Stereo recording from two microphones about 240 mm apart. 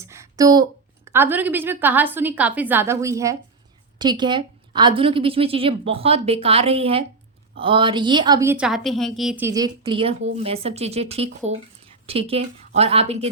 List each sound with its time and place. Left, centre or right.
0.0 s a woman's voice: centre